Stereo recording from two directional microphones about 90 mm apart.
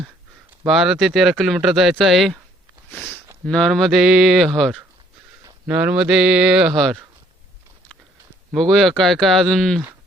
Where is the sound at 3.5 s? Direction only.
5° left (ahead or behind).